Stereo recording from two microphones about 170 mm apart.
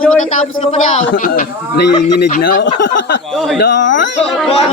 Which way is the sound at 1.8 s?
70° left (ahead or behind).